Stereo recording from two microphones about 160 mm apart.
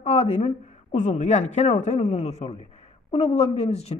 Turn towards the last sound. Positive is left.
turn(degrees=40)  # may be behind; listen again after turning